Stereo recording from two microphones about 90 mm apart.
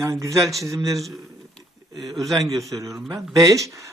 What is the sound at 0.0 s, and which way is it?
Speech, 35° right (ahead or behind).